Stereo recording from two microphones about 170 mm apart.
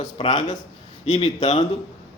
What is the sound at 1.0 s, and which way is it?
Speech, 40° left (ahead or behind).